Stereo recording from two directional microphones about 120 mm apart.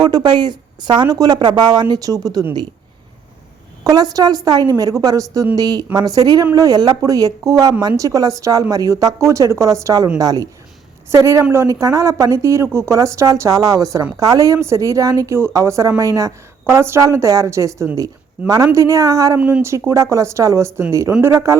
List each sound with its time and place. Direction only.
0.0 s speech: 35° right (ahead or behind)
3.8 s speech: 30° right (ahead or behind)
19.4 s speech: 10° right (ahead or behind)
19.9 s speech: 25° right (ahead or behind)